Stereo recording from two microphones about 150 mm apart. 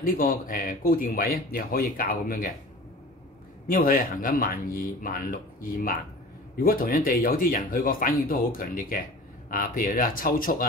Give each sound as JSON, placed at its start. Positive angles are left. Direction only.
{"t": 0.0, "sound": "speech", "side_deg": 70}
{"t": 3.6, "sound": "speech", "side_deg": 70}